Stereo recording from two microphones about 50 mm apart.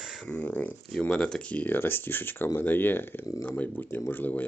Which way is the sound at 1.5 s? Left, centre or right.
Left.